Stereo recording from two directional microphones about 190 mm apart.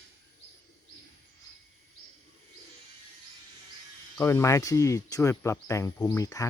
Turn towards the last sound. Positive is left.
turn(degrees=15)  # may be behind; listen again after turning